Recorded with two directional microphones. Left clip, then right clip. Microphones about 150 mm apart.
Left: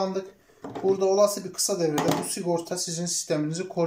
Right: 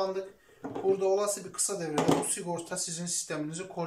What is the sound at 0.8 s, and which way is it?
Speech, 20° left (ahead or behind).